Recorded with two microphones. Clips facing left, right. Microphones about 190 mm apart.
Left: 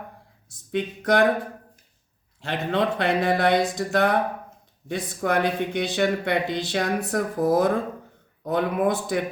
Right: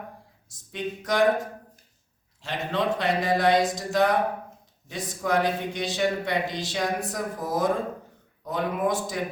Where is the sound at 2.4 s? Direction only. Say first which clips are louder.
Left 3 dB; 60° left (ahead or behind).